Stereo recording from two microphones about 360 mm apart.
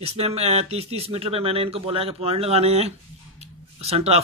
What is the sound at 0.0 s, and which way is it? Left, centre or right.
Speech, centre.